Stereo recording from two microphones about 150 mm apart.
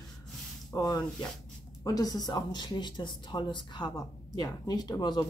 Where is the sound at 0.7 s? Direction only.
25° left (ahead or behind).